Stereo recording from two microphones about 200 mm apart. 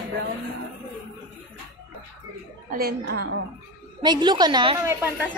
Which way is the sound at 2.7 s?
50° right (ahead or behind).